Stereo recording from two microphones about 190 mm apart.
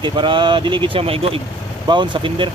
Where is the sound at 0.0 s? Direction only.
25° right (ahead or behind).